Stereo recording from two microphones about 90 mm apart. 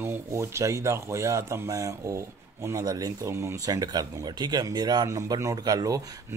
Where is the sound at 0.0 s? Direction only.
30° right (ahead or behind).